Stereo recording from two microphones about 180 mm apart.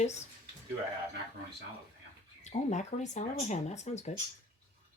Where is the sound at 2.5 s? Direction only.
40° left (ahead or behind).